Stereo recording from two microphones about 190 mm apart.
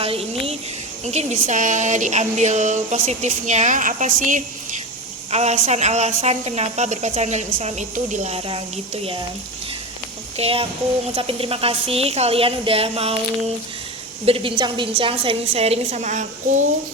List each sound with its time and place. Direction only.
0.0 s a woman's voice: 30° right (ahead or behind)
10.3 s a woman's voice: 30° right (ahead or behind)
14.3 s a woman's voice: 30° right (ahead or behind)